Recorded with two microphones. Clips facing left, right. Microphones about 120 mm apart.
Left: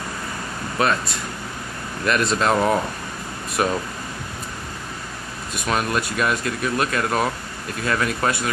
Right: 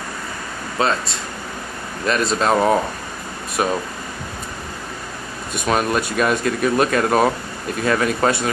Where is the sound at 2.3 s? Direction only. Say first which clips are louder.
Right 4 dB; 20° right (ahead or behind).